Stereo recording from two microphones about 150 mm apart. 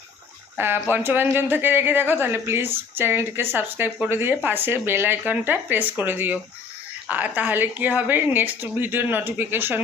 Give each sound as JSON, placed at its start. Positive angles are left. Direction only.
{"t": 0.5, "sound": "a woman's voice", "side_deg": -15}